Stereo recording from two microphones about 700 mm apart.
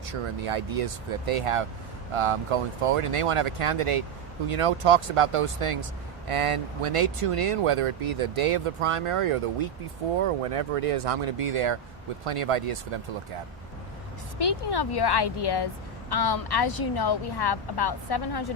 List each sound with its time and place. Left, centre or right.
0.1 s speech: right
14.3 s a woman's voice: left